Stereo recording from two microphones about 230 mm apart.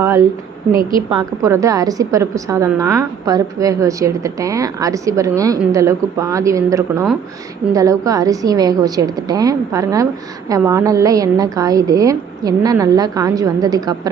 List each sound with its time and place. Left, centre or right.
0.0 s speech: centre
0.8 s a woman's voice: right
1.1 s a woman's voice: centre